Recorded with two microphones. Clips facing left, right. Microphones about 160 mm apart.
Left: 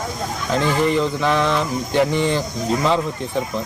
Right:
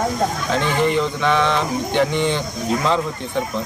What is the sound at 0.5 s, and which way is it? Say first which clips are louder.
Speech: left 1 dB; centre (ahead or behind).